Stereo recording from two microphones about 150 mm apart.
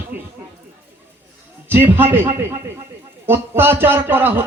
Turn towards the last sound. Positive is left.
turn(degrees=-15)  # may be behind; listen again after turning